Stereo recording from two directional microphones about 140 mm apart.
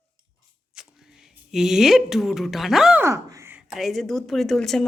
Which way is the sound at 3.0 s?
20° right (ahead or behind).